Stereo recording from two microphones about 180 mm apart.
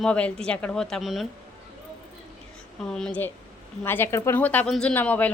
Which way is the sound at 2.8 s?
5° left (ahead or behind).